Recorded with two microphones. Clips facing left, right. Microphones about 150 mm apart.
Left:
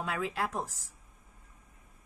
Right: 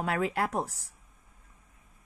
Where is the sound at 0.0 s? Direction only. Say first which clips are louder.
Right 4 dB; 60° right (ahead or behind).